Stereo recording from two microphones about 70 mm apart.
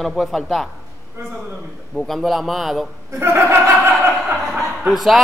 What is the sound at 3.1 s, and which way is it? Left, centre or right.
Speech, right.